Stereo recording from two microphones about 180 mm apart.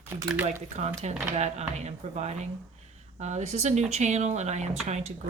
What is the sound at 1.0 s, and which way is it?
Speech, 40° right (ahead or behind).